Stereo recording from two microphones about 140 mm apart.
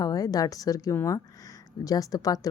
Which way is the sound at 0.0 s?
25° left (ahead or behind).